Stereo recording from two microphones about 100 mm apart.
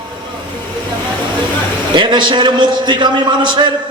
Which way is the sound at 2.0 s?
50° right (ahead or behind).